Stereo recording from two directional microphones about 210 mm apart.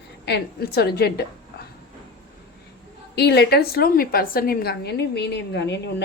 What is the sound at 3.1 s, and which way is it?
A woman's voice, 50° left (ahead or behind).